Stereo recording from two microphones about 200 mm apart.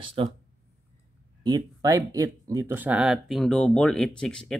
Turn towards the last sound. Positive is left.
turn(degrees=5)  # may be behind; listen again after turning